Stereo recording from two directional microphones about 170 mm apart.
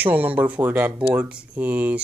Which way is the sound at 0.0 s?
10° right (ahead or behind).